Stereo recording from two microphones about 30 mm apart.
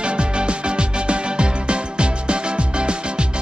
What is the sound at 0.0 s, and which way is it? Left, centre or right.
Music, right.